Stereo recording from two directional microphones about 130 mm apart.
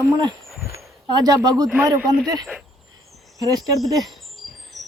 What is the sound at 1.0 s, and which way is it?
Speech, 30° right (ahead or behind).